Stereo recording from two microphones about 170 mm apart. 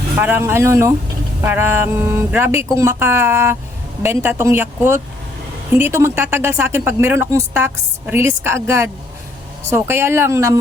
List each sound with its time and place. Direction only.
0.2 s speech: 10° right (ahead or behind)